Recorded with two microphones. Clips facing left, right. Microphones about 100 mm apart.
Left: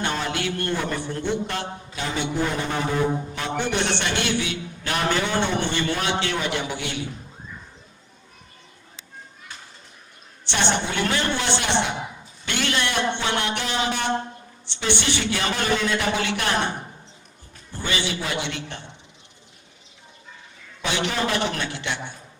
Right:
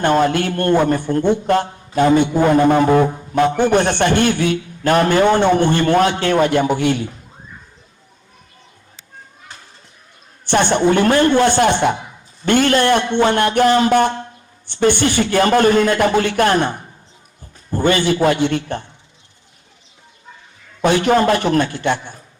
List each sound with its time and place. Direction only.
0.0 s a man's voice: 50° right (ahead or behind)
10.4 s a man's voice: 50° right (ahead or behind)
20.8 s a man's voice: 50° right (ahead or behind)